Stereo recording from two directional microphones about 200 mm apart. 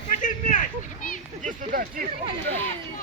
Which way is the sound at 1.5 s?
45° right (ahead or behind).